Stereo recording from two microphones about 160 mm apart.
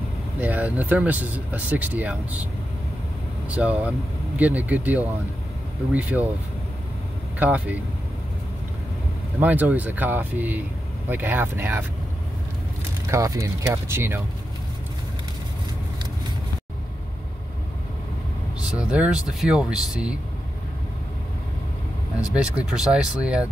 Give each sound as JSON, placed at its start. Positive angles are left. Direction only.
{"t": 0.4, "sound": "speech", "side_deg": -10}
{"t": 3.4, "sound": "speech", "side_deg": -10}
{"t": 7.3, "sound": "speech", "side_deg": -10}
{"t": 9.4, "sound": "speech", "side_deg": -10}
{"t": 13.1, "sound": "speech", "side_deg": -20}
{"t": 18.6, "sound": "speech", "side_deg": -5}
{"t": 22.3, "sound": "speech", "side_deg": -5}